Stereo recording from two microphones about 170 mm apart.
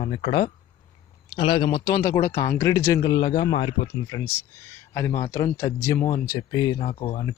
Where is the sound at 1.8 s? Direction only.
15° left (ahead or behind).